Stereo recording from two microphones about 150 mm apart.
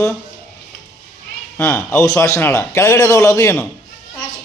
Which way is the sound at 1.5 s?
15° left (ahead or behind).